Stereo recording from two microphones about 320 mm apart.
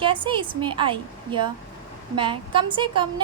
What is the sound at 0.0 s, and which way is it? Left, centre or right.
A woman's voice, centre.